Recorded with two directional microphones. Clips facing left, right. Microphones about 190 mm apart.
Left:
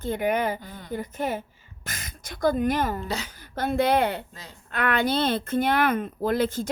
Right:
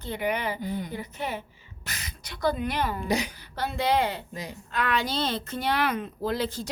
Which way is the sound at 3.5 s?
50° left (ahead or behind).